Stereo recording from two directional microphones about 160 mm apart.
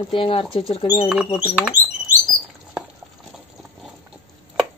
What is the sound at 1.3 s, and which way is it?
Speech, 10° right (ahead or behind).